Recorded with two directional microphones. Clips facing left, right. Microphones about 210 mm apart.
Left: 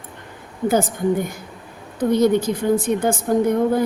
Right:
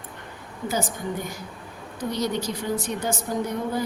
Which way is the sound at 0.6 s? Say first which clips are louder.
Left 9 dB; 55° left (ahead or behind).